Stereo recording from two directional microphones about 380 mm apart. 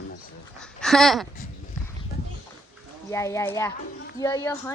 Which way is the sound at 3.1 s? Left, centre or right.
Centre.